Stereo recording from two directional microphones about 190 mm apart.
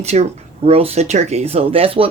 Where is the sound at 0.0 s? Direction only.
35° right (ahead or behind).